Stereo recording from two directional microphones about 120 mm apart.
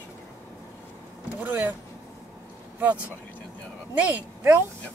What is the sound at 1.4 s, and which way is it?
Speech, 15° right (ahead or behind).